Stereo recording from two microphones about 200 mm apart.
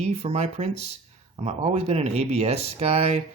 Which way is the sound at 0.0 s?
30° right (ahead or behind).